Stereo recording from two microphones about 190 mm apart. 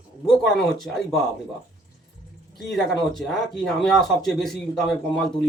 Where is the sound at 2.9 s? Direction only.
Centre (ahead or behind).